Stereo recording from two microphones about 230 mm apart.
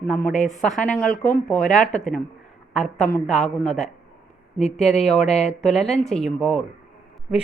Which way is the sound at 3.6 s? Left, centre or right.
Left.